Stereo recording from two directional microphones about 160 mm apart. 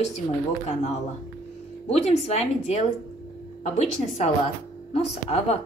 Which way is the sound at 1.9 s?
40° left (ahead or behind).